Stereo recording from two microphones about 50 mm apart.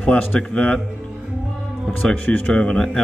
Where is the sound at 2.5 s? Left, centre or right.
Centre.